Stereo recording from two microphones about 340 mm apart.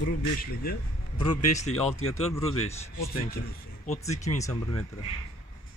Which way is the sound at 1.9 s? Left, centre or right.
Left.